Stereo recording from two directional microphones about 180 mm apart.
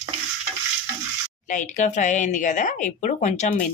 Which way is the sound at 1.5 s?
40° left (ahead or behind).